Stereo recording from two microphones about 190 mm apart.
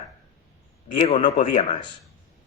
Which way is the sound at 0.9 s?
40° left (ahead or behind).